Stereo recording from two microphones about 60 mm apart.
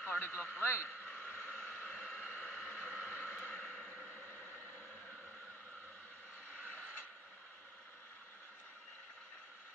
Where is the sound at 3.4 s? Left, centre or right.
Left.